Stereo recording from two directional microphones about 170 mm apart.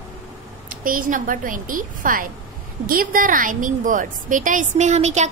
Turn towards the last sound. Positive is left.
turn(degrees=-40)  # may be behind; listen again after turning